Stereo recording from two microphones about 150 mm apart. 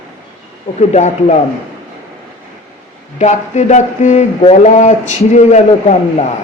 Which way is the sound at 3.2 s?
50° left (ahead or behind).